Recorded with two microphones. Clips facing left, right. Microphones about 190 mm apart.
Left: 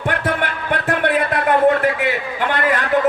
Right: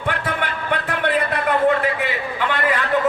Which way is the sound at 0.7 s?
45° left (ahead or behind).